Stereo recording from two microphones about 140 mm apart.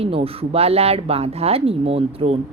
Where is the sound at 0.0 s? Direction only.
45° right (ahead or behind).